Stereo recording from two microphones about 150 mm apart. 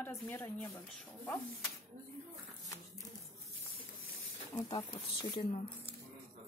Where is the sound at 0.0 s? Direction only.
15° left (ahead or behind).